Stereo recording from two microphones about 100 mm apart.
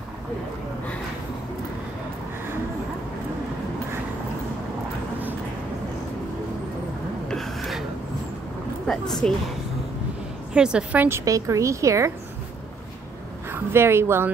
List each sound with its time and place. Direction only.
7.2 s gasp: 5° left (ahead or behind)
8.8 s speech: 5° left (ahead or behind)
10.5 s a woman's voice: 10° right (ahead or behind)
11.1 s a woman's voice: 30° right (ahead or behind)
13.5 s a woman's voice: 25° right (ahead or behind)